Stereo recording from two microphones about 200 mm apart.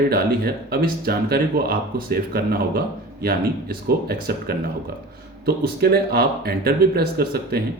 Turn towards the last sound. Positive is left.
turn(degrees=-50)  # may be behind; listen again after turning